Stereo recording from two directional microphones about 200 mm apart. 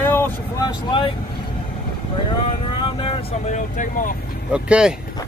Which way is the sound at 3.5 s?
40° left (ahead or behind).